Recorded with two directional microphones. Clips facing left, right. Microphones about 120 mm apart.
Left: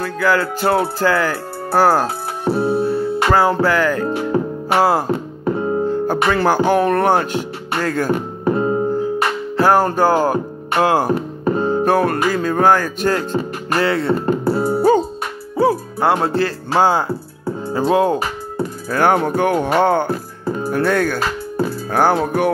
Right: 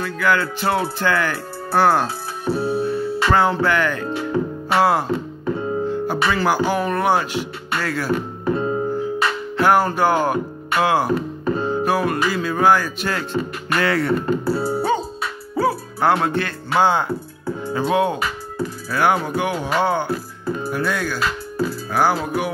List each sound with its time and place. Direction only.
0.0 s music: 35° left (ahead or behind)
2.0 s music: 60° left (ahead or behind)
3.3 s music: 35° left (ahead or behind)
4.2 s music: 55° left (ahead or behind)
4.8 s music: 35° left (ahead or behind)
5.1 s speech: 45° left (ahead or behind)
9.2 s music: 40° left (ahead or behind)
17.5 s speech: 40° left (ahead or behind); by 22.5 s 55° left (ahead or behind)